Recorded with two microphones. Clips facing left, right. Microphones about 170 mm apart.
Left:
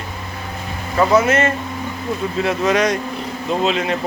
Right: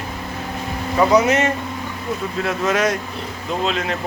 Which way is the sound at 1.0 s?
15° right (ahead or behind).